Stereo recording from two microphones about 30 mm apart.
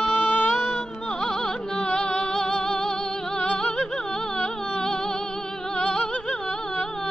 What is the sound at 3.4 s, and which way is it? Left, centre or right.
Music, left.